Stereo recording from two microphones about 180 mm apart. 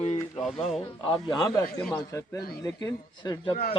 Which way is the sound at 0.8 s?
25° left (ahead or behind).